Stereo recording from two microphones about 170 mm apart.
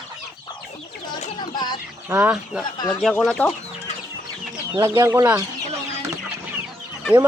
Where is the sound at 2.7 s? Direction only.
25° left (ahead or behind).